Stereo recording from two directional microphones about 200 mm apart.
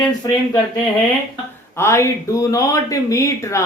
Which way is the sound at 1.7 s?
15° left (ahead or behind).